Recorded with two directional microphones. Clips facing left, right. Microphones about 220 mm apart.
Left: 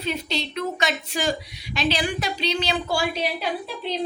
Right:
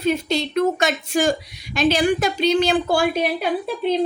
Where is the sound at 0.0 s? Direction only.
45° right (ahead or behind).